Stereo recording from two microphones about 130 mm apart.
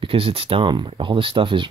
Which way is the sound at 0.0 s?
45° right (ahead or behind).